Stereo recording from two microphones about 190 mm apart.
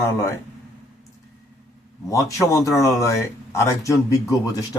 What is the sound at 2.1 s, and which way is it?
Speech, 15° left (ahead or behind).